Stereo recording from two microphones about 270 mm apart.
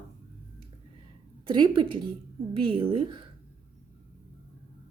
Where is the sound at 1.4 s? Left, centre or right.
Centre.